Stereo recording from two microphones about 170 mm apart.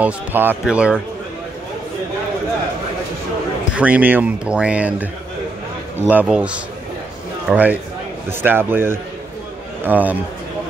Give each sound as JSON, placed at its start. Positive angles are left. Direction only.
{"t": 0.0, "sound": "speech", "side_deg": -10}
{"t": 3.7, "sound": "speech", "side_deg": -10}